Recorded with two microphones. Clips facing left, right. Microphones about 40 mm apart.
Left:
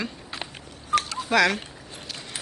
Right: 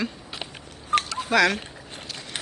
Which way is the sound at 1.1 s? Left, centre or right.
Centre.